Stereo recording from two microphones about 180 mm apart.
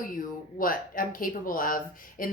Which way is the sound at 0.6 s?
50° left (ahead or behind).